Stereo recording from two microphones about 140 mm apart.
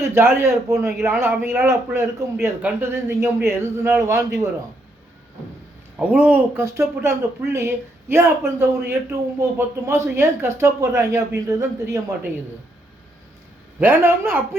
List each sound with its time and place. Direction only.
0.0 s a man's voice: 15° right (ahead or behind)
6.0 s a man's voice: 10° right (ahead or behind)
13.7 s speech: 15° right (ahead or behind)